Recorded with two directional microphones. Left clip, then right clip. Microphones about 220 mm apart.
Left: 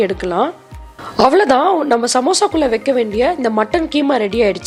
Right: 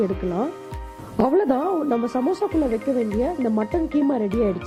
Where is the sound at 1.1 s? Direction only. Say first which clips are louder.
Left 9 dB; 25° left (ahead or behind).